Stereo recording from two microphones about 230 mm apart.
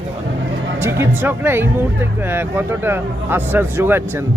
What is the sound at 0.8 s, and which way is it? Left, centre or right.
Speech, centre.